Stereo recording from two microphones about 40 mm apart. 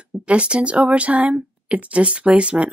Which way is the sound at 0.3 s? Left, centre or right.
Right.